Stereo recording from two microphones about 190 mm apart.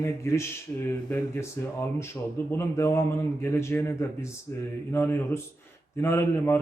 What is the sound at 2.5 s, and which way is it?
A man's voice, 15° left (ahead or behind).